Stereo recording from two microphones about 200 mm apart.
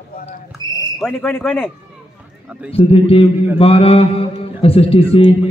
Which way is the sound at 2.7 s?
30° left (ahead or behind).